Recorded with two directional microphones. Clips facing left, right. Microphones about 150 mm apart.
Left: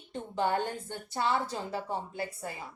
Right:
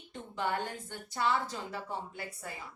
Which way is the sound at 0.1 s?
30° left (ahead or behind).